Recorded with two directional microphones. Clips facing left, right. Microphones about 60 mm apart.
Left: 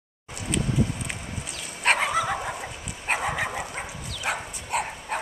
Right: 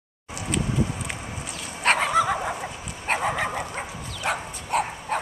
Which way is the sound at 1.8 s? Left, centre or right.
Centre.